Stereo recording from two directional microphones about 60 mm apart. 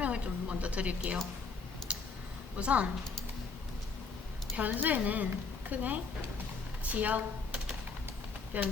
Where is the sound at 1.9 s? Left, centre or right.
Centre.